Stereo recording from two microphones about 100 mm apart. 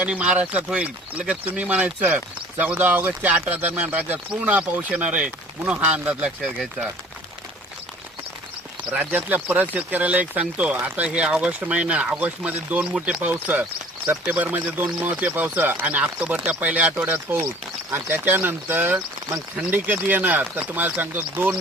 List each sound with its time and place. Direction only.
0.0 s speech: 10° right (ahead or behind)
8.9 s speech: 15° right (ahead or behind)